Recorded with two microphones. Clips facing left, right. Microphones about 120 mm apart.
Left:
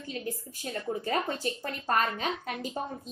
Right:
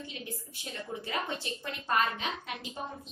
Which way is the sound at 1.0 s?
45° left (ahead or behind).